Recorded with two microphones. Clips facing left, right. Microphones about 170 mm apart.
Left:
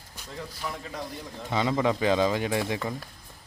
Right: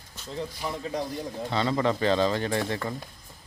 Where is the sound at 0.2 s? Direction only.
15° left (ahead or behind).